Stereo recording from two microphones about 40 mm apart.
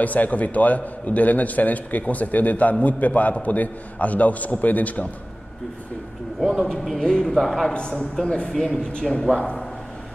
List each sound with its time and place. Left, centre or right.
0.0 s a man's voice: left
6.4 s a man's voice: centre
7.1 s speech: centre
7.3 s a man's voice: centre
7.7 s a man's voice: left